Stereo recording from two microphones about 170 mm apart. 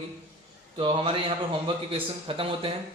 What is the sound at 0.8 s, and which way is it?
Speech, 30° right (ahead or behind).